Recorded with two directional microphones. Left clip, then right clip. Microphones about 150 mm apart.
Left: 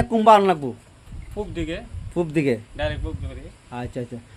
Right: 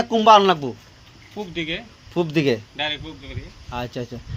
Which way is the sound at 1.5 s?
30° left (ahead or behind).